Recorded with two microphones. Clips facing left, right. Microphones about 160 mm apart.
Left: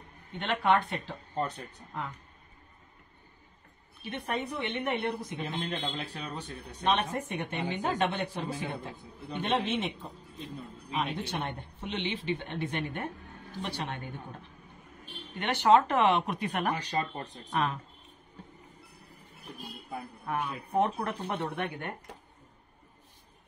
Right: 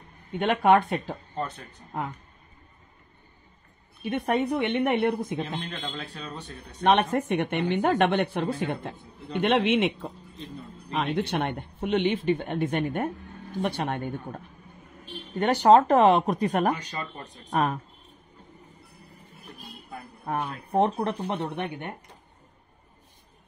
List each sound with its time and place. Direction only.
0.4 s speech: 55° right (ahead or behind)
4.1 s speech: 60° right (ahead or behind)
5.7 s a man's voice: 15° left (ahead or behind)
6.8 s speech: 65° right (ahead or behind)
15.3 s speech: 40° right (ahead or behind)
20.2 s speech: 35° right (ahead or behind)